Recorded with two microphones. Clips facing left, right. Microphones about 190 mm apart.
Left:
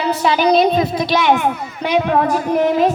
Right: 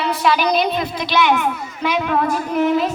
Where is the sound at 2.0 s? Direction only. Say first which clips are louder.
Left 2 dB; 40° left (ahead or behind).